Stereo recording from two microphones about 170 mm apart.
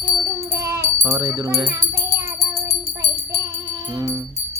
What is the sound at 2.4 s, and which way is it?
Music, 40° left (ahead or behind).